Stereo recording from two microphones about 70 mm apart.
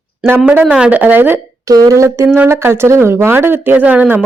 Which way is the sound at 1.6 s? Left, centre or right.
Right.